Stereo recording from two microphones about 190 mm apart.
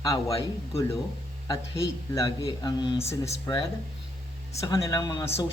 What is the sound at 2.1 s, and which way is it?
Speech, 20° left (ahead or behind).